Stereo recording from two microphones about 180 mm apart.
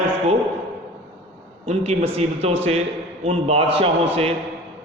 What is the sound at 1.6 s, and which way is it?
A man's voice, 35° right (ahead or behind).